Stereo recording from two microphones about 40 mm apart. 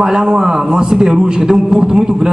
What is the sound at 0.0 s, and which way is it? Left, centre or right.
A man's voice, centre.